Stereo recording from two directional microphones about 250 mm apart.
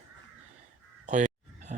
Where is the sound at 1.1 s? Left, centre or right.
Right.